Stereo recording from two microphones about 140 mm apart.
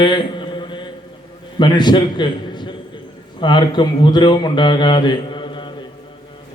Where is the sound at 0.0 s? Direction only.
35° left (ahead or behind).